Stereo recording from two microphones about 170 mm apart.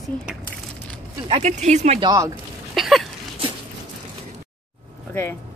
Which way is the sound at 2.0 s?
20° right (ahead or behind).